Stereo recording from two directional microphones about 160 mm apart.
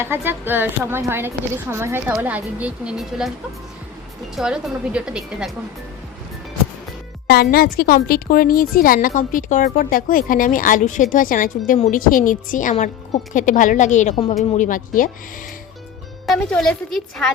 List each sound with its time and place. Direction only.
0.0 s a woman's voice: 15° right (ahead or behind)
4.4 s speech: 5° right (ahead or behind)
7.5 s a woman's voice: 70° left (ahead or behind); by 14.3 s 45° left (ahead or behind)
14.5 s a woman's voice: 55° left (ahead or behind)
16.2 s speech: centre (ahead or behind)